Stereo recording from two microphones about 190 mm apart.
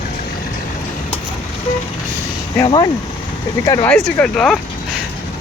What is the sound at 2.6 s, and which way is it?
Speech, 25° left (ahead or behind).